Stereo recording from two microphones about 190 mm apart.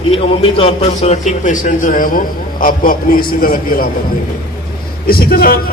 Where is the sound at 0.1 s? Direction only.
30° left (ahead or behind); by 3.8 s 50° left (ahead or behind).